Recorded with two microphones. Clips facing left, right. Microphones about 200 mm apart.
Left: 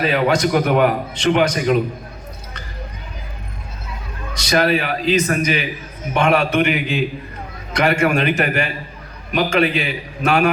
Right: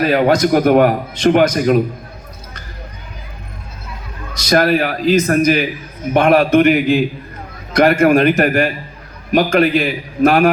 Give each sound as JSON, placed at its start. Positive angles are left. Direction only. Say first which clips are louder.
{"t": 0.0, "sound": "a man's voice", "louder": "right 4 dB", "side_deg": -50}
{"t": 4.4, "sound": "a man's voice", "louder": "right 4 dB", "side_deg": -50}